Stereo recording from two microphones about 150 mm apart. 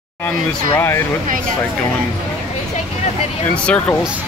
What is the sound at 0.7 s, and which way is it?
Speech, 15° left (ahead or behind).